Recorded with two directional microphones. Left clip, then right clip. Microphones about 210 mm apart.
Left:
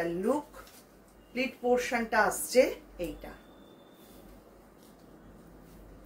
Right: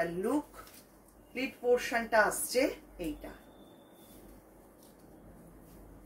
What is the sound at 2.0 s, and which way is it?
Speech, 15° left (ahead or behind).